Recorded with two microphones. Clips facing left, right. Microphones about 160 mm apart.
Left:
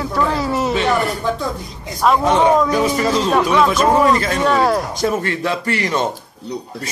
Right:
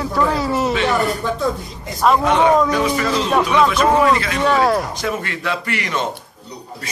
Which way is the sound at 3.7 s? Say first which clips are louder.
Left 1 dB; 40° left (ahead or behind).